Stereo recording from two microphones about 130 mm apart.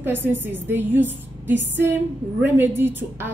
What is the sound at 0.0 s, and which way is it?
A woman's voice, 15° right (ahead or behind).